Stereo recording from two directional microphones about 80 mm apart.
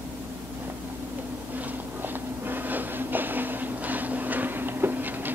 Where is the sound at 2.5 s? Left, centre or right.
Right.